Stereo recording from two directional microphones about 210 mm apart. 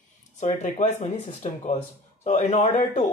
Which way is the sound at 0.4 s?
35° left (ahead or behind).